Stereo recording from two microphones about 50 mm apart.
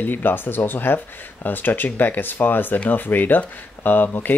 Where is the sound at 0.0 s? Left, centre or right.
Left.